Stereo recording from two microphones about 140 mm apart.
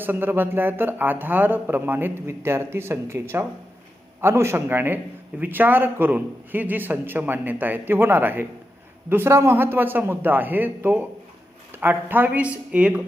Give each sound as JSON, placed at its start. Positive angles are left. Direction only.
{"t": 0.0, "sound": "speech", "side_deg": -15}